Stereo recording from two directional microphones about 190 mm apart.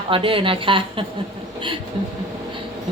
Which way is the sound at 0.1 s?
25° right (ahead or behind).